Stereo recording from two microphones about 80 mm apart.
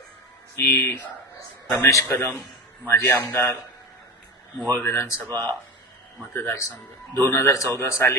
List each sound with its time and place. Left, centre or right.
0.5 s a man's voice: left
4.7 s a man's voice: left